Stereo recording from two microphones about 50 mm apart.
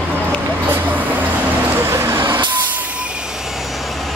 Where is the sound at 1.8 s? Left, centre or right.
Right.